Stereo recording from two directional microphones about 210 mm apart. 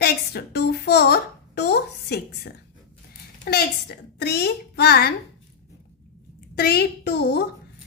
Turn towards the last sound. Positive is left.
turn(degrees=50)  # may be behind; listen again after turning